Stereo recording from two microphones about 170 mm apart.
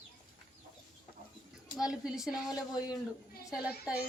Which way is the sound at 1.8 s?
5° right (ahead or behind).